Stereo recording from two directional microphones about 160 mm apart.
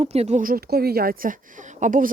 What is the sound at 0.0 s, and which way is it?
Speech, 40° right (ahead or behind).